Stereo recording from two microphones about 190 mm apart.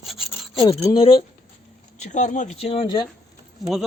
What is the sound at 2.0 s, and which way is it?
Speech, 40° left (ahead or behind).